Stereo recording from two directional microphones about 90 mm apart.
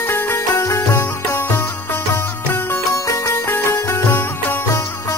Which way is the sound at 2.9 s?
35° left (ahead or behind).